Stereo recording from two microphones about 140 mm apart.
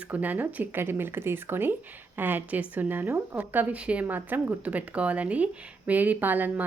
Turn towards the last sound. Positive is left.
turn(degrees=-10)  # may be behind; listen again after turning